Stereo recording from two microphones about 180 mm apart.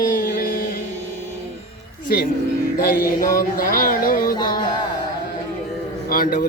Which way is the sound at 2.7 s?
55° left (ahead or behind).